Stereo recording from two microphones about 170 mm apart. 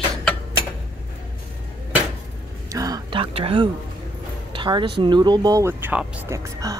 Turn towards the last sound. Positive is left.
turn(degrees=-20)  # may be behind; listen again after turning